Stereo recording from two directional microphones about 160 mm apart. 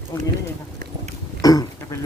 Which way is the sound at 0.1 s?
15° left (ahead or behind).